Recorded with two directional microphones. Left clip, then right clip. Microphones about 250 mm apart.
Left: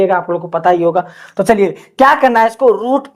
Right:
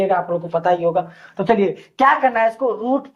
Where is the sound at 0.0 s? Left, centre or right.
Left.